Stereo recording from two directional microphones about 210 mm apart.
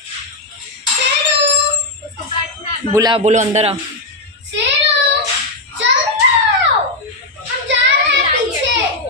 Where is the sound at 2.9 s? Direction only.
20° right (ahead or behind).